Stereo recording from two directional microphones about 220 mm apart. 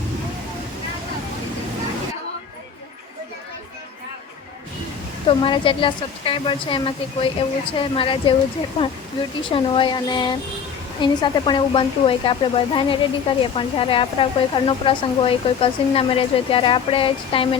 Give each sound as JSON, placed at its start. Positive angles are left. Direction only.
{"t": 5.4, "sound": "speech", "side_deg": 25}
{"t": 9.5, "sound": "speech", "side_deg": 25}